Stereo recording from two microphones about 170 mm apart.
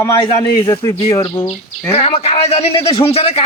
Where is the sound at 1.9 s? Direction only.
40° left (ahead or behind).